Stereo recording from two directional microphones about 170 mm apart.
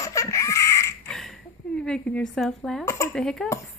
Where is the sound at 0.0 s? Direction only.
20° left (ahead or behind).